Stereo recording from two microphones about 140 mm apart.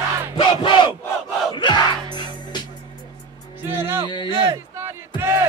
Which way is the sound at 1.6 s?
35° left (ahead or behind).